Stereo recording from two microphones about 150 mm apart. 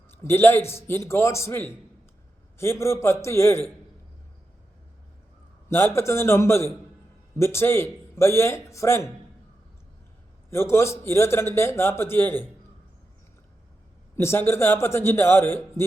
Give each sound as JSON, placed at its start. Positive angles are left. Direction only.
{"t": 0.2, "sound": "a man's voice", "side_deg": 15}
{"t": 5.6, "sound": "a man's voice", "side_deg": 15}
{"t": 10.5, "sound": "a man's voice", "side_deg": 15}
{"t": 14.2, "sound": "a man's voice", "side_deg": 15}